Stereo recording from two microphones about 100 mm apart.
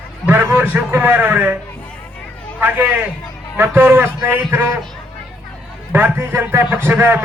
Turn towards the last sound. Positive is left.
turn(degrees=-20)  # may be behind; listen again after turning